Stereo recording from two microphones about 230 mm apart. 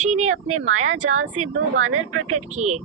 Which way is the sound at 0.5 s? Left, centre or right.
Right.